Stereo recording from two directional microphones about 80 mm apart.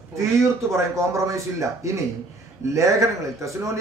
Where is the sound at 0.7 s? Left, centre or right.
Right.